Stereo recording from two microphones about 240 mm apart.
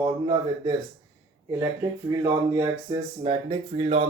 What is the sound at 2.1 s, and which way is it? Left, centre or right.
Speech, centre.